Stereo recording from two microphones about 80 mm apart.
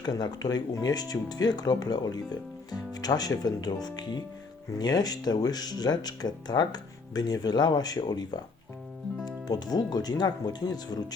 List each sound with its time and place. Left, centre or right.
0.0 s speech: left